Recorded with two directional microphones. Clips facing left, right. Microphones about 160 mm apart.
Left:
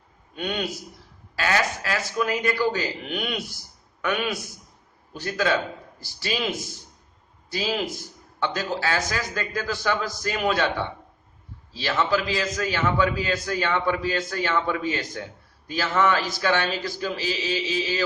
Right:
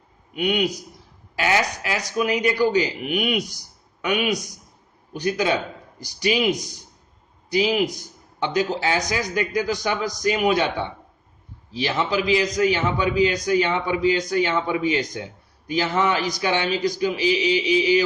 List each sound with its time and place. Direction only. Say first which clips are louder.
0.3 s a man's voice: right 6 dB; 15° right (ahead or behind)